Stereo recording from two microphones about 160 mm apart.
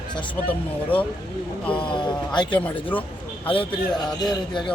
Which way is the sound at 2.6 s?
10° left (ahead or behind).